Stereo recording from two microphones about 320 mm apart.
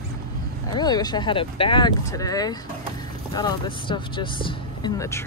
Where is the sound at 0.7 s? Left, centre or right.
Centre.